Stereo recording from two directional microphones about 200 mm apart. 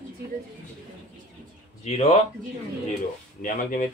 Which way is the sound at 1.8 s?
30° left (ahead or behind).